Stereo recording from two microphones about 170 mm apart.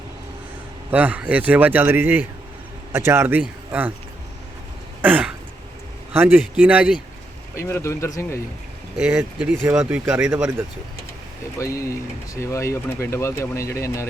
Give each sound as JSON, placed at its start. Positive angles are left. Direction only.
{"t": 0.9, "sound": "speech", "side_deg": -10}
{"t": 5.0, "sound": "throat clearing", "side_deg": -10}
{"t": 6.1, "sound": "speech", "side_deg": -10}
{"t": 7.5, "sound": "speech", "side_deg": 15}
{"t": 9.0, "sound": "speech", "side_deg": -5}
{"t": 11.5, "sound": "speech", "side_deg": 20}